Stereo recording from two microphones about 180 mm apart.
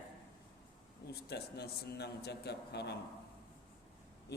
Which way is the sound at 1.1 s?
65° left (ahead or behind).